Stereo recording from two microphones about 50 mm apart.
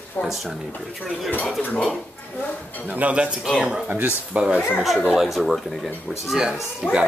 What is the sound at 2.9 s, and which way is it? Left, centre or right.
Speech, right.